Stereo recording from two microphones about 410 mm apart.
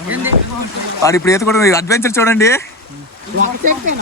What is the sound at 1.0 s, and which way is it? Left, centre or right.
Speech, centre.